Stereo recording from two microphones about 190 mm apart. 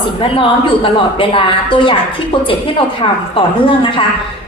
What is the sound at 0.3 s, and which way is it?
A woman's voice, 25° left (ahead or behind).